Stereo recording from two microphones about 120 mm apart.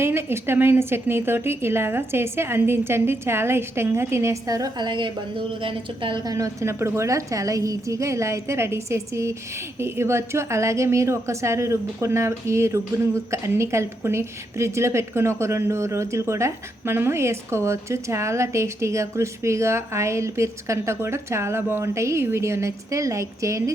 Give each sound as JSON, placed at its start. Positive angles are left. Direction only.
{"t": 0.0, "sound": "a woman's voice", "side_deg": -20}